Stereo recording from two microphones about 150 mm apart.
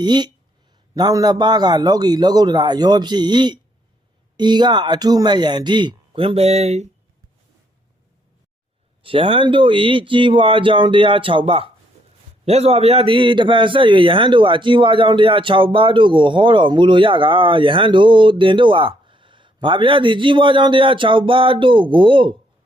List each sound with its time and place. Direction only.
0.0 s a man's voice: 30° right (ahead or behind); by 6.8 s 45° right (ahead or behind)
9.0 s a man's voice: 35° right (ahead or behind)